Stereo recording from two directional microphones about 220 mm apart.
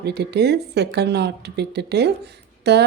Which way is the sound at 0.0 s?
50° right (ahead or behind).